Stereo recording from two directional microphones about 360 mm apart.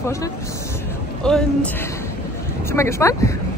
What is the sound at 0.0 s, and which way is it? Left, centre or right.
Speech, centre.